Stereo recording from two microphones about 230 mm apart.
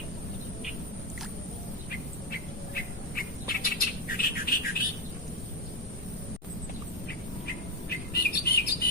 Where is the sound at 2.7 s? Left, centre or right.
Left.